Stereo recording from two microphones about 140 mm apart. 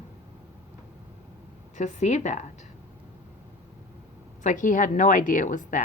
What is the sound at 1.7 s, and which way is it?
Speech, 55° left (ahead or behind).